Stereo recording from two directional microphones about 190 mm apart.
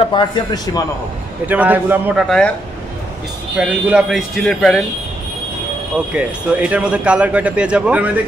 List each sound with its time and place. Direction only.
0.0 s a man's voice: 25° left (ahead or behind)
1.5 s speech: 10° right (ahead or behind)
2.2 s speech: 5° left (ahead or behind)
3.5 s speech: 5° right (ahead or behind)
6.1 s speech: 5° right (ahead or behind)